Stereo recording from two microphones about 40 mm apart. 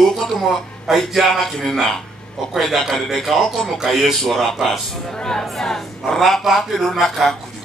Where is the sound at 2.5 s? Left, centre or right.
Centre.